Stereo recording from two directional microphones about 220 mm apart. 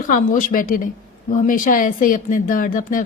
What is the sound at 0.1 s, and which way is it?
A woman's voice, 40° left (ahead or behind).